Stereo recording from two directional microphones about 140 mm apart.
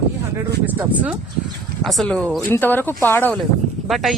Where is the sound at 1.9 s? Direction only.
5° left (ahead or behind).